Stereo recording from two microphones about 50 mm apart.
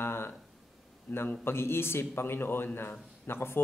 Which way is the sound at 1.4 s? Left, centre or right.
Left.